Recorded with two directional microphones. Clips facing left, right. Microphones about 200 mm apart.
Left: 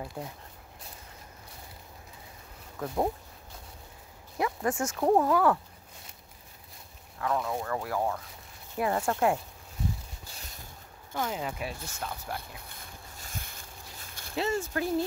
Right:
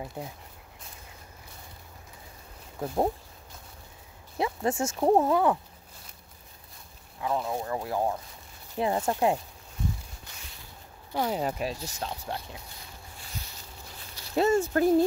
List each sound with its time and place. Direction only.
0.2 s speech: 20° right (ahead or behind)
4.4 s speech: 25° right (ahead or behind)
7.2 s speech: 25° right (ahead or behind)
11.1 s speech: 40° right (ahead or behind)
12.6 s a sound: 50° left (ahead or behind)
14.3 s speech: 45° right (ahead or behind)